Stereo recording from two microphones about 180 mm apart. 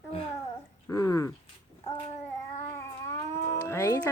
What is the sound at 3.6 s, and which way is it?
Speech, 15° left (ahead or behind).